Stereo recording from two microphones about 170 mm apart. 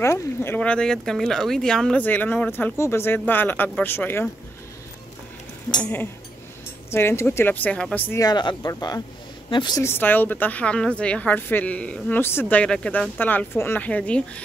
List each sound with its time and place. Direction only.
0.0 s a woman's voice: 15° left (ahead or behind)
5.7 s a woman's voice: 10° left (ahead or behind)
8.2 s a woman's voice: 25° left (ahead or behind); by 14.4 s 5° left (ahead or behind)